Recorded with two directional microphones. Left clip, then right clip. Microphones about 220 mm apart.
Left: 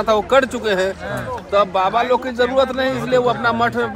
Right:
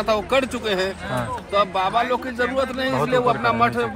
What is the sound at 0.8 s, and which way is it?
Speech, 45° left (ahead or behind).